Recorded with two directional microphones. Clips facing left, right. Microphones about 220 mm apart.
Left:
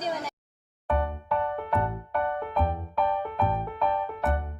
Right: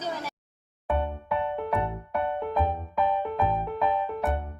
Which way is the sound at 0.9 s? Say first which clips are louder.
Even; 15° right (ahead or behind).